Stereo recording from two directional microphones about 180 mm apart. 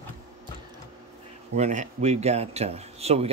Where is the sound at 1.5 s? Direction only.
40° right (ahead or behind).